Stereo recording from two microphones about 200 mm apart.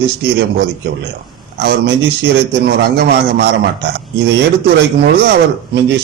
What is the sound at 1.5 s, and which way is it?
A man's voice, 55° right (ahead or behind).